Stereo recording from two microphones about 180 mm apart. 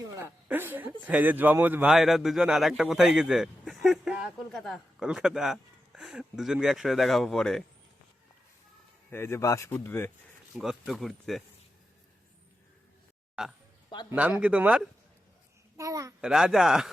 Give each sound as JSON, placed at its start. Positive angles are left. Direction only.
{"t": 0.1, "sound": "a woman's voice", "side_deg": -10}
{"t": 9.0, "sound": "speech", "side_deg": 15}
{"t": 10.6, "sound": "a man's voice", "side_deg": 0}
{"t": 13.4, "sound": "a man's voice", "side_deg": -5}
{"t": 15.8, "sound": "speech", "side_deg": -20}
{"t": 16.2, "sound": "a man's voice", "side_deg": -5}